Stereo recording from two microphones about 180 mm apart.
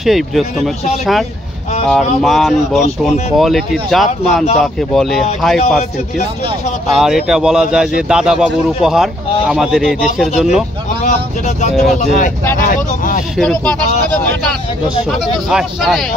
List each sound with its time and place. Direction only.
0.0 s a man's voice: centre (ahead or behind)
6.9 s a man's voice: centre (ahead or behind)
11.1 s speech: 40° left (ahead or behind)
13.4 s a man's voice: centre (ahead or behind)
15.0 s a man's voice: centre (ahead or behind)